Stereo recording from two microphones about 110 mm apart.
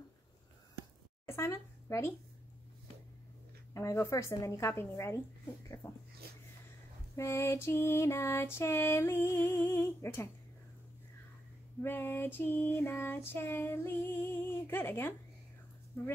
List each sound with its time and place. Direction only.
1.3 s speech: 25° left (ahead or behind)
3.7 s female singing: 30° left (ahead or behind)
7.2 s female singing: 25° left (ahead or behind)
11.8 s female singing: 20° left (ahead or behind)